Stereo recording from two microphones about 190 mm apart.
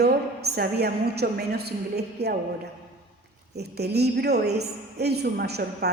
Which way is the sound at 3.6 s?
60° right (ahead or behind).